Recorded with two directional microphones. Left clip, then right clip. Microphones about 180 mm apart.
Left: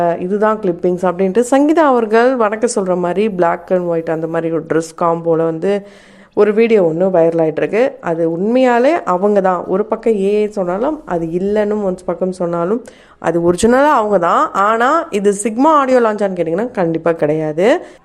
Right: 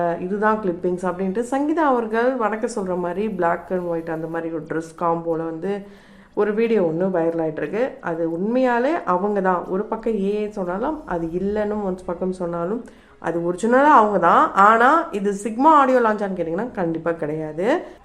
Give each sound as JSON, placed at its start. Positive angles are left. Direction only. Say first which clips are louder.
{"t": 0.0, "sound": "speech", "louder": "left 7 dB", "side_deg": 45}